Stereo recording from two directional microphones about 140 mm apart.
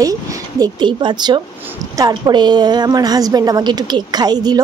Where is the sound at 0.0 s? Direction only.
25° right (ahead or behind).